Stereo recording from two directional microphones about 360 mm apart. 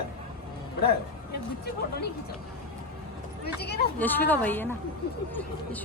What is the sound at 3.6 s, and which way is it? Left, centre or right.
Speech, left.